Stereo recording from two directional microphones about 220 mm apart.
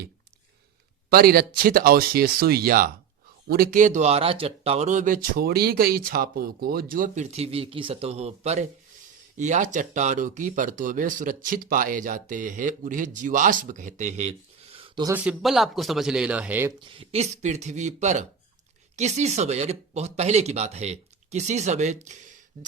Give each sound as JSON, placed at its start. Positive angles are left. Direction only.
{"t": 1.1, "sound": "speech", "side_deg": -45}
{"t": 15.1, "sound": "speech", "side_deg": -5}
{"t": 16.8, "sound": "speech", "side_deg": -25}